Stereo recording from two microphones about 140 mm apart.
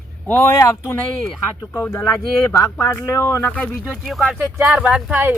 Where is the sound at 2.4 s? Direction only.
25° left (ahead or behind).